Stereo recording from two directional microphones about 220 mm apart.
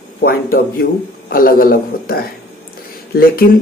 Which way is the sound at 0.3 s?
45° left (ahead or behind).